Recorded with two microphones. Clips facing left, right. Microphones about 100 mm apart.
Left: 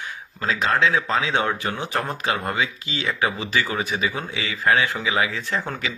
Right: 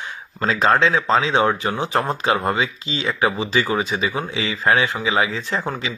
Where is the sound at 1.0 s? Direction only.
25° right (ahead or behind).